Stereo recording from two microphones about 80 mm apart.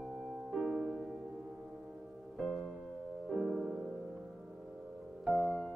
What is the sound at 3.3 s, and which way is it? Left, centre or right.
Music, centre.